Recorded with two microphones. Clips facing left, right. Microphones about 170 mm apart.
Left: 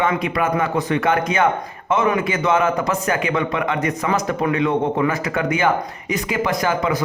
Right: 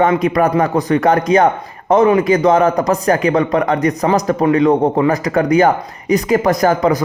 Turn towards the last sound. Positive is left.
turn(degrees=-40)  # may be behind; listen again after turning